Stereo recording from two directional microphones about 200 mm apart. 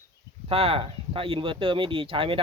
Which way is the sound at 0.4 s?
30° right (ahead or behind).